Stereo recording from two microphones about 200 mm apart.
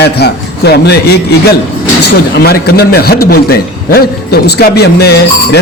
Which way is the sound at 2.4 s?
50° left (ahead or behind).